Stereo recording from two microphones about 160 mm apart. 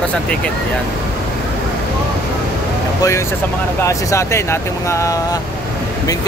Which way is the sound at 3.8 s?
20° left (ahead or behind).